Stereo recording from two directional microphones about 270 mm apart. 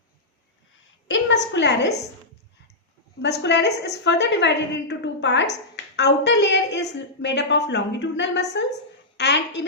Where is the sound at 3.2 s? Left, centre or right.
Left.